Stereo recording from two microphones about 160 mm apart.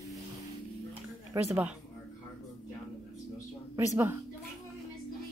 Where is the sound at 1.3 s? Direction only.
10° right (ahead or behind).